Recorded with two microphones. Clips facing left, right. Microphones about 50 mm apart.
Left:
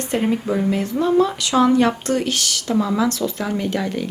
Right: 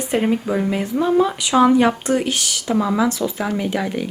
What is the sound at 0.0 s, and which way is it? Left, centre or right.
Speech, centre.